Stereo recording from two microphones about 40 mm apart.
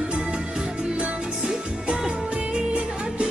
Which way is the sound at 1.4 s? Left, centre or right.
Right.